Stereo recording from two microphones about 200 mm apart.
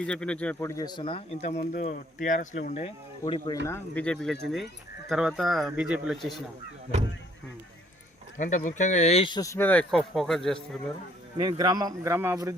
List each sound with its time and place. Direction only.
0.0 s speech: 5° left (ahead or behind); by 1.4 s 25° left (ahead or behind)
1.4 s speech: 40° left (ahead or behind)
3.7 s speech: 10° left (ahead or behind)
8.4 s speech: 40° left (ahead or behind); by 10.6 s centre (ahead or behind)
11.3 s speech: 20° right (ahead or behind)